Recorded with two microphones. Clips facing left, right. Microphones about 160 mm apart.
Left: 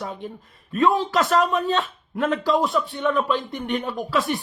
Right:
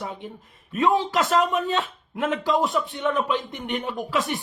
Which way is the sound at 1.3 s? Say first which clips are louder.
Left 1 dB; 15° right (ahead or behind).